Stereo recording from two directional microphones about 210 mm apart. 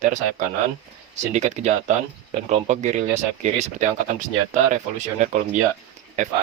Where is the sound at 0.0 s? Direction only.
35° right (ahead or behind).